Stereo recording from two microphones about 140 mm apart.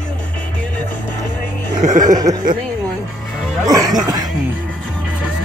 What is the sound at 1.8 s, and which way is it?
Music, 60° right (ahead or behind).